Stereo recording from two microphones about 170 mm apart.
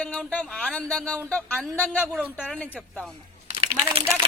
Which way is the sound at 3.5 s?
35° right (ahead or behind).